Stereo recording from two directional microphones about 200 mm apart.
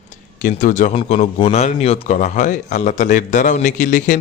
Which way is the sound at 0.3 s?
40° left (ahead or behind).